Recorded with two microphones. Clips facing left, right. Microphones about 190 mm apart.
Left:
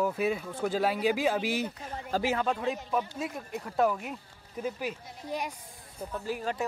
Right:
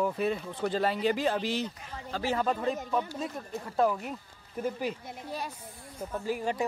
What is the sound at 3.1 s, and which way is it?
Speech, 10° left (ahead or behind).